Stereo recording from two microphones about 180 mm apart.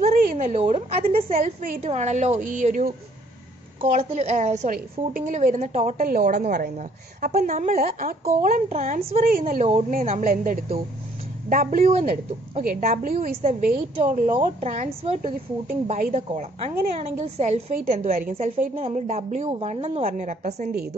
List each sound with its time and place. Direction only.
0.1 s a woman's voice: 50° right (ahead or behind)
1.3 s a woman's voice: 50° right (ahead or behind)
6.5 s speech: 55° right (ahead or behind)
7.4 s a woman's voice: 40° right (ahead or behind)
8.2 s a woman's voice: 40° right (ahead or behind)
14.3 s a woman's voice: 30° right (ahead or behind)
15.9 s a woman's voice: 40° right (ahead or behind)
17.8 s a woman's voice: 50° right (ahead or behind)